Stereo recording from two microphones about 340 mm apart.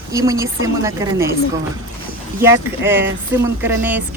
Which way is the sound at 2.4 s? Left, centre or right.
Centre.